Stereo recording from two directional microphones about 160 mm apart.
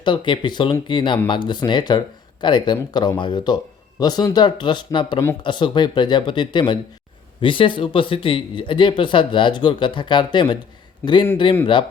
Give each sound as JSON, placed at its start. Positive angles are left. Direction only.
{"t": 0.0, "sound": "a man's voice", "side_deg": 30}